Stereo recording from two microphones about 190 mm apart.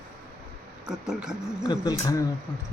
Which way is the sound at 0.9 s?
5° right (ahead or behind).